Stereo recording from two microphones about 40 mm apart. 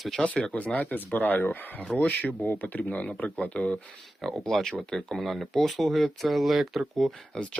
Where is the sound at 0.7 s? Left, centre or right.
Left.